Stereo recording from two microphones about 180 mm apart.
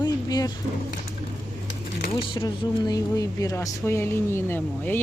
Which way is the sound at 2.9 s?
20° left (ahead or behind).